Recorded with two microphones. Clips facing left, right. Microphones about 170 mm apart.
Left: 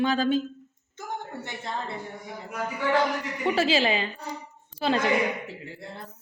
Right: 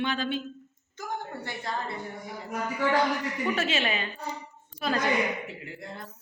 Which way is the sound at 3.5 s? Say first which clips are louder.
Left 6 dB; 30° left (ahead or behind).